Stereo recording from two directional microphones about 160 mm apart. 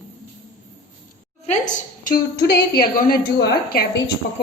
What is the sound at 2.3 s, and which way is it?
A woman's voice, 85° left.